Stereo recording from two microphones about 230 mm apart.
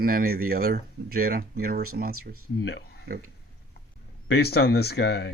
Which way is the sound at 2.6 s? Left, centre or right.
Left.